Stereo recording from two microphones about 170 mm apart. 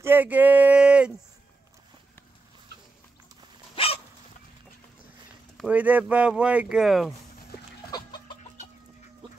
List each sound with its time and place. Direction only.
0.0 s a sound: 10° right (ahead or behind)
3.7 s dog: 35° left (ahead or behind)
5.7 s speech: 10° right (ahead or behind)